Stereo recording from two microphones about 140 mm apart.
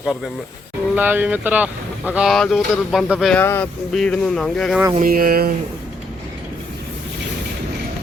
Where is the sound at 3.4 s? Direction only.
15° left (ahead or behind).